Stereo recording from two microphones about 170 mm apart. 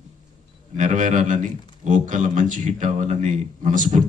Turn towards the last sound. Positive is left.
turn(degrees=-50)  # may be behind; listen again after turning